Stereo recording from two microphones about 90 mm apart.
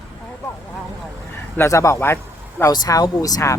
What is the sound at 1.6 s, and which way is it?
Speech, 35° left (ahead or behind).